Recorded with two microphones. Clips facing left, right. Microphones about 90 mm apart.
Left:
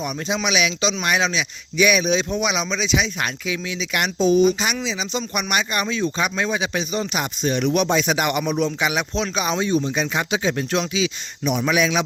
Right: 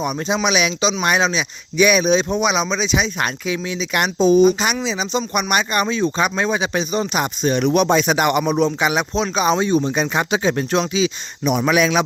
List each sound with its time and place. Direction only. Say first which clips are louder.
0.0 s speech: right 4 dB; 35° right (ahead or behind)
4.4 s speech: right 3 dB; 45° right (ahead or behind)
11.4 s a man's voice: right 3 dB; 50° right (ahead or behind)